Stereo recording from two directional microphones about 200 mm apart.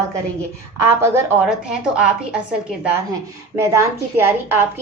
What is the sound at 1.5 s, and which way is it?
A woman's voice, 5° right (ahead or behind).